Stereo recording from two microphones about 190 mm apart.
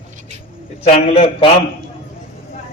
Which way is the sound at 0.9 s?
30° left (ahead or behind).